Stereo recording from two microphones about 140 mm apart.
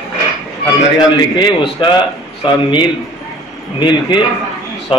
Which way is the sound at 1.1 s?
30° left (ahead or behind).